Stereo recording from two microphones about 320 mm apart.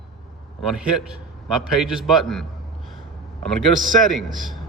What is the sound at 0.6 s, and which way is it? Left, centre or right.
A man's voice, centre.